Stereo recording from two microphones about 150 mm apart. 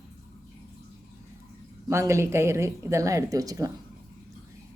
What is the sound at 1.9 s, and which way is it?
A woman's voice, 20° right (ahead or behind).